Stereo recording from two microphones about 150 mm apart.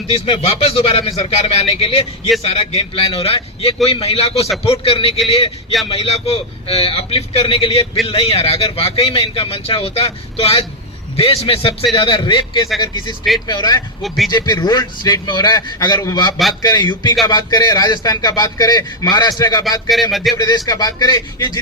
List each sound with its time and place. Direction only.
0.1 s a man's voice: 40° left (ahead or behind)
19.9 s a sound: centre (ahead or behind)
20.3 s a man's voice: 30° left (ahead or behind)